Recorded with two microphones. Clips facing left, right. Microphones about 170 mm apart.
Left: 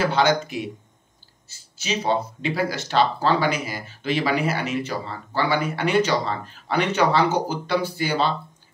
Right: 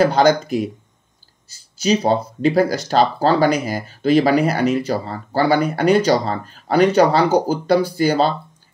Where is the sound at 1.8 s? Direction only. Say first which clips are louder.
Right 7 dB; 40° right (ahead or behind).